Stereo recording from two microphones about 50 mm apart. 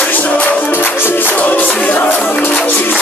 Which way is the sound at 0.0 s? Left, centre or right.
Left.